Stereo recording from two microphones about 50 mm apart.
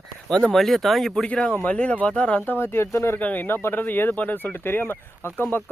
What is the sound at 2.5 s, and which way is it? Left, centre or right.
Speech, left.